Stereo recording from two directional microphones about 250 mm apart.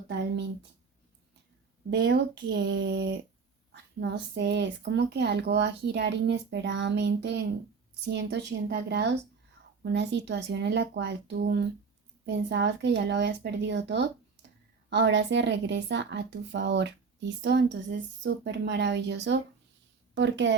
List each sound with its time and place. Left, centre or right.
1.9 s speech: right